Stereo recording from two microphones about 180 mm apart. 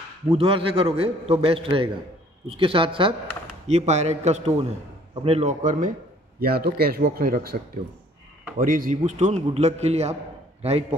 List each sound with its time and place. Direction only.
0.3 s a man's voice: 30° right (ahead or behind); by 5.9 s 45° right (ahead or behind)
6.4 s a man's voice: 60° right (ahead or behind); by 11.0 s 35° right (ahead or behind)